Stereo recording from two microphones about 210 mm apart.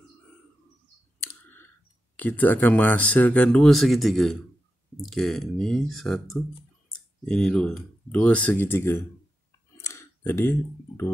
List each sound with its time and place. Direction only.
2.1 s speech: 10° left (ahead or behind)
9.8 s clicking: 15° left (ahead or behind)